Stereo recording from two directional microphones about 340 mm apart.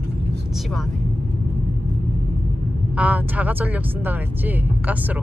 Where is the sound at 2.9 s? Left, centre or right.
Centre.